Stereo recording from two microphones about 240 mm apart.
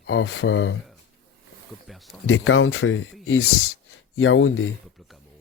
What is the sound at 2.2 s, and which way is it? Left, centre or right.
Speech, left.